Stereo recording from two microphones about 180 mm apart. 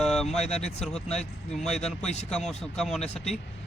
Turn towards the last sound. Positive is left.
turn(degrees=35)  # may be behind; listen again after turning